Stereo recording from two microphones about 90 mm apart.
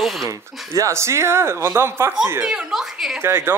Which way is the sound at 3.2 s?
25° right (ahead or behind).